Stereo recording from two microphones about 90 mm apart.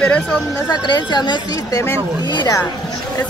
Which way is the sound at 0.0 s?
10° left (ahead or behind).